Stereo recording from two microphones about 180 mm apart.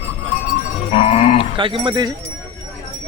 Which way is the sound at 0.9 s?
35° left (ahead or behind).